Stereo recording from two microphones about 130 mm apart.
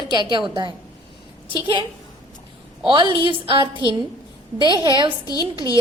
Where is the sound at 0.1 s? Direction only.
35° right (ahead or behind).